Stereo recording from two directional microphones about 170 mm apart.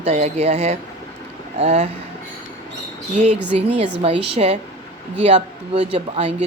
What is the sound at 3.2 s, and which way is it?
Speech, 50° right (ahead or behind).